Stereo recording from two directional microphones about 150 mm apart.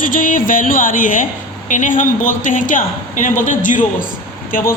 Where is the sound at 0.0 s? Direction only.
65° left (ahead or behind).